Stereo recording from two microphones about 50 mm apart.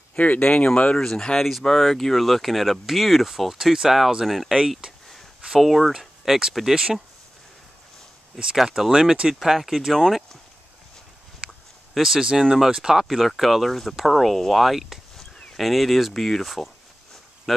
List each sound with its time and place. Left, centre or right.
0.1 s speech: left
0.9 s speech: centre
8.5 s speech: centre
9.4 s speech: centre
11.9 s speech: centre
15.1 s a sound: centre
15.5 s speech: centre